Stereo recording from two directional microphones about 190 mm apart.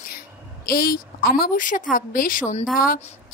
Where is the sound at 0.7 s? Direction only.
55° left (ahead or behind).